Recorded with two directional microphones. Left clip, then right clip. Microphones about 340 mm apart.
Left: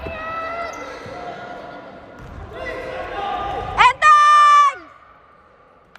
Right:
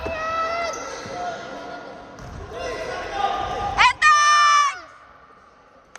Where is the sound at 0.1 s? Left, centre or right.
Right.